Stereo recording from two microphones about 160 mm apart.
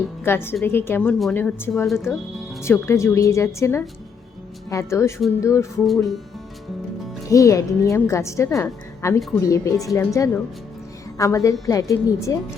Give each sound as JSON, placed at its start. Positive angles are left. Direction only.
{"t": 0.3, "sound": "a woman's voice", "side_deg": 15}
{"t": 5.8, "sound": "speech", "side_deg": 0}
{"t": 7.3, "sound": "a woman's voice", "side_deg": 20}